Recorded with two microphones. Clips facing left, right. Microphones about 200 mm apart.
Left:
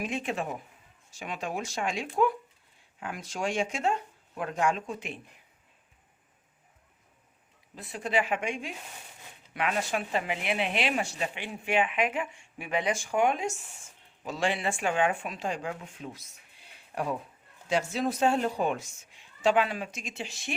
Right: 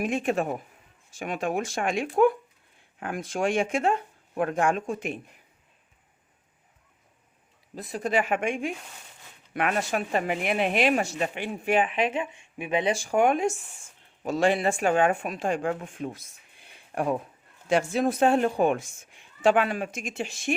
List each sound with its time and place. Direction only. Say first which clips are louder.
0.0 s speech: right 6 dB; 50° right (ahead or behind)
7.8 s speech: right 3 dB; 40° right (ahead or behind); by 12.9 s 20° right (ahead or behind)
12.9 s speech: right 4 dB; 40° right (ahead or behind)